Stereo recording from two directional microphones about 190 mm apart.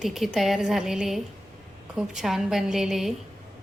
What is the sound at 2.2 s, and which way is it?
Speech, centre (ahead or behind).